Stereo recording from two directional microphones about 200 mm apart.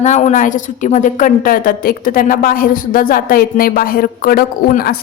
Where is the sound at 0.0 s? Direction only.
35° left (ahead or behind).